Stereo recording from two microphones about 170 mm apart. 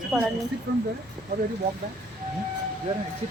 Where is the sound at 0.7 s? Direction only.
75° right (ahead or behind).